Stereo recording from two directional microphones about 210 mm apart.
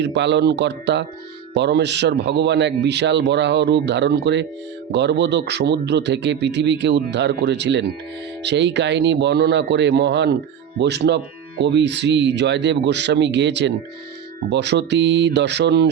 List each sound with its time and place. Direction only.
0.0 s speech: 55° right (ahead or behind)